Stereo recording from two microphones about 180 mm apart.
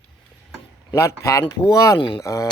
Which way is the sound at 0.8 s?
15° left (ahead or behind).